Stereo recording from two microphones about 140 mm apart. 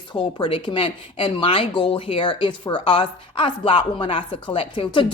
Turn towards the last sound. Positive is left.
turn(degrees=40)  # may be behind; listen again after turning